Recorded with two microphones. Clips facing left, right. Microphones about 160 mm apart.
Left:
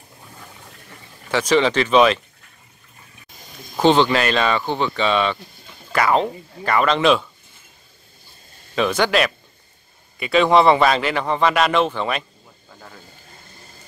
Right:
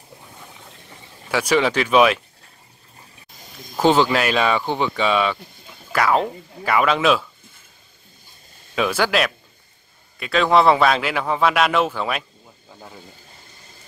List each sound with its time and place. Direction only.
1.3 s speech: 10° right (ahead or behind)
3.7 s a man's voice: 5° right (ahead or behind)
8.7 s a man's voice: 5° right (ahead or behind)